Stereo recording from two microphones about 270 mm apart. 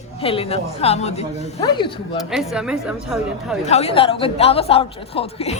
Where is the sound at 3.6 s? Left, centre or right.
Left.